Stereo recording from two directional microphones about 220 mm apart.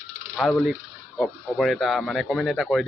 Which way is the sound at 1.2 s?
Centre (ahead or behind).